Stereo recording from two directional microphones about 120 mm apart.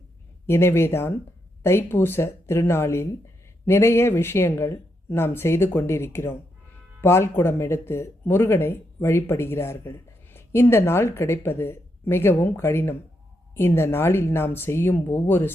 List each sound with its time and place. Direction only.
0.4 s speech: 20° left (ahead or behind)